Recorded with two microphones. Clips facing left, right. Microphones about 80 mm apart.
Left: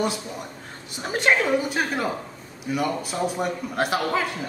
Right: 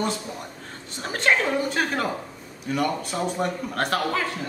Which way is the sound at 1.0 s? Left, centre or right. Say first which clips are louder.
Left 1 dB; centre.